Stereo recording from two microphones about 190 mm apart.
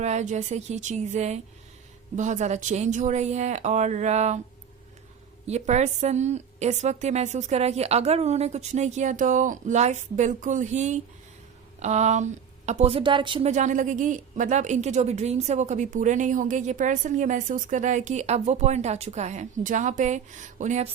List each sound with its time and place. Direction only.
0.0 s speech: 35° right (ahead or behind)
5.5 s speech: 35° right (ahead or behind)
13.5 s speech: 40° right (ahead or behind)